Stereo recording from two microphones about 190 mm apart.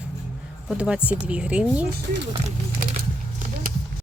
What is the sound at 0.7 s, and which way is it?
Speech, 5° right (ahead or behind).